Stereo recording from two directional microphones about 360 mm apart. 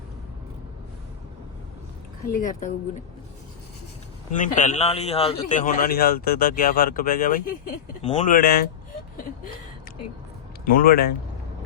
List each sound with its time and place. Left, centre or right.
2.3 s a man's voice: left
4.3 s a man's voice: left
10.8 s a man's voice: left